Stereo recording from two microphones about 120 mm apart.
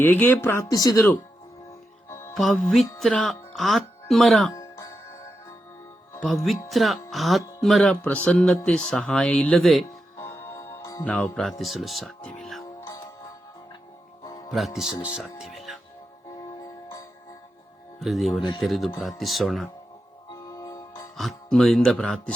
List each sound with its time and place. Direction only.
0.0 s speech: 15° left (ahead or behind)
0.7 s speech: 30° left (ahead or behind)
2.0 s music: 25° left (ahead or behind)
2.3 s speech: centre (ahead or behind)
6.2 s speech: centre (ahead or behind)
10.2 s music: 20° left (ahead or behind)
11.0 s speech: 10° left (ahead or behind)
11.6 s speech: centre (ahead or behind)
14.5 s speech: centre (ahead or behind)
15.4 s music: centre (ahead or behind)
18.0 s speech: centre (ahead or behind)
20.3 s music: 30° left (ahead or behind)
21.2 s speech: centre (ahead or behind)